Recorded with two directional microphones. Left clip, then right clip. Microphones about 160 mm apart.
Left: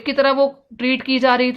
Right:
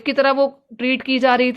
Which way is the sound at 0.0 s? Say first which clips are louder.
Even; 45° right (ahead or behind).